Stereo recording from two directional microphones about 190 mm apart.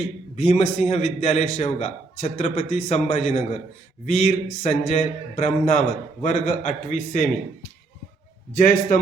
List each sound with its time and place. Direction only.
0.3 s a man's voice: 35° left (ahead or behind)
8.5 s a man's voice: 45° left (ahead or behind)